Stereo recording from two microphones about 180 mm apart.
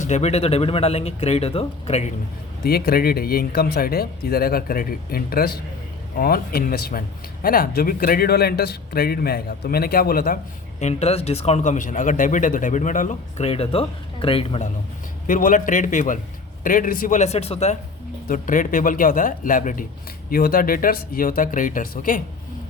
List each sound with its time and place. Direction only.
0.0 s speech: 40° left (ahead or behind)
2.6 s speech: 55° left (ahead or behind)
10.8 s speech: 40° left (ahead or behind)
15.3 s speech: 50° left (ahead or behind)
18.3 s speech: 45° left (ahead or behind)